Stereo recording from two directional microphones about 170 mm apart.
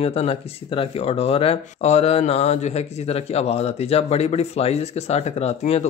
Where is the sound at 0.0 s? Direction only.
35° left (ahead or behind).